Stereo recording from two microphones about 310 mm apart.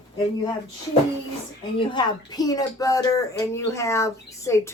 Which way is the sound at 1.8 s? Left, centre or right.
Centre.